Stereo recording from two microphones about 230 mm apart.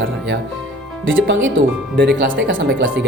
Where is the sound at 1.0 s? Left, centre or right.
Right.